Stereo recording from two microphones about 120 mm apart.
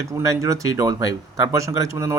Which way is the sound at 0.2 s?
25° right (ahead or behind).